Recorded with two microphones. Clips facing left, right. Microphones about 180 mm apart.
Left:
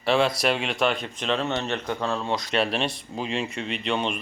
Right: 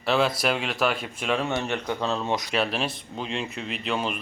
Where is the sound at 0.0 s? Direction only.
Centre (ahead or behind).